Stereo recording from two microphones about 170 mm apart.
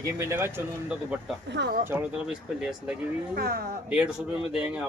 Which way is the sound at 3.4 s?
60° right (ahead or behind).